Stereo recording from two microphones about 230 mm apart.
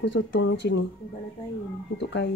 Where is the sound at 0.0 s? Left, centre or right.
Left.